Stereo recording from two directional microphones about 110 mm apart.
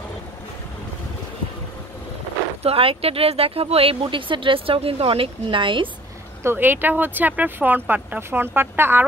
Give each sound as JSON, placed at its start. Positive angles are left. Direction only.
{"t": 2.6, "sound": "speech", "side_deg": -60}
{"t": 6.4, "sound": "speech", "side_deg": -20}